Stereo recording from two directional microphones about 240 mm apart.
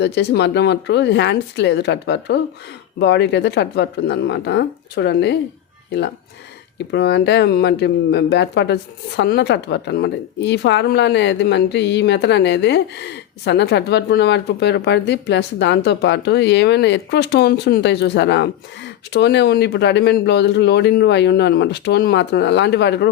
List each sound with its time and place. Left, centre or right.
0.0 s speech: left
6.7 s speech: left